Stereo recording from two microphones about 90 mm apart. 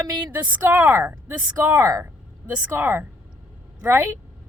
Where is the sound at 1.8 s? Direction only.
40° right (ahead or behind).